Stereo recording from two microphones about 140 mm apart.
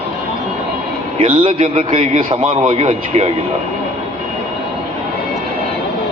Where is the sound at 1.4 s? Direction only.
40° right (ahead or behind).